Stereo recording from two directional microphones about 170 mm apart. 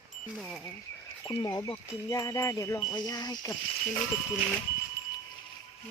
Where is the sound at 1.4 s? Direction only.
20° left (ahead or behind).